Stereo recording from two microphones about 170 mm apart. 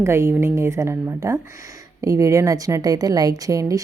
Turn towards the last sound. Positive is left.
turn(degrees=-20)  # may be behind; listen again after turning